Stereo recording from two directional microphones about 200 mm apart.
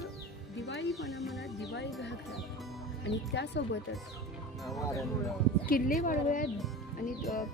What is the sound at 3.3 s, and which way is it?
Speech, 60° left (ahead or behind).